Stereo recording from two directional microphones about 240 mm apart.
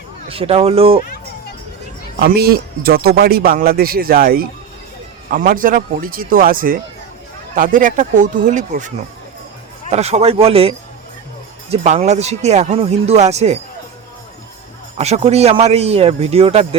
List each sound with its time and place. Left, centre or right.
0.3 s speech: right
2.2 s speech: right
9.9 s speech: right
14.9 s speech: right